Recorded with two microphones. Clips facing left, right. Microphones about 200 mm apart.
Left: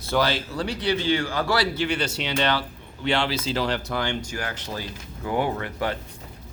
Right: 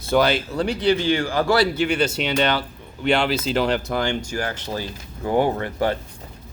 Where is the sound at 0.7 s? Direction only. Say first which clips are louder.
Right 4 dB; 55° right (ahead or behind).